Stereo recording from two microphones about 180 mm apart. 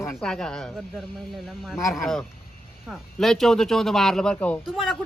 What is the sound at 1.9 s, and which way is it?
A woman's voice, centre (ahead or behind).